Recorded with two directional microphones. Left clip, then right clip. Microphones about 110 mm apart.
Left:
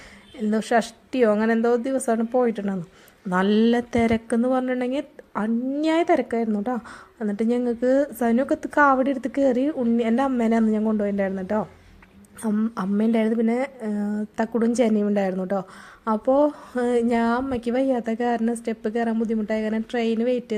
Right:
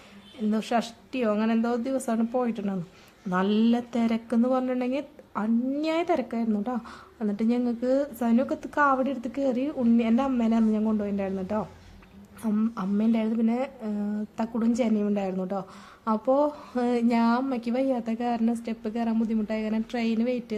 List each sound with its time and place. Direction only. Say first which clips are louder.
0.5 s a woman's voice: left 6 dB; 30° left (ahead or behind)
12.7 s a woman's voice: left 5 dB; 40° left (ahead or behind)